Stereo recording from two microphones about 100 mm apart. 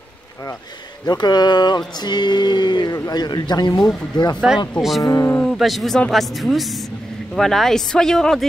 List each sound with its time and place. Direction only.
1.0 s a sound: 45° left (ahead or behind)
5.0 s music: 35° left (ahead or behind)
5.5 s a man's voice: centre (ahead or behind)